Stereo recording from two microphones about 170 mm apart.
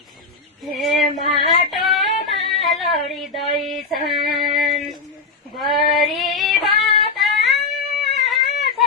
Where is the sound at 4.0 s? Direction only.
60° right (ahead or behind).